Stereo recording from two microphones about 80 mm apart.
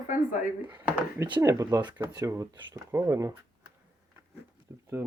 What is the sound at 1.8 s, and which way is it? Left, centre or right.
Speech, right.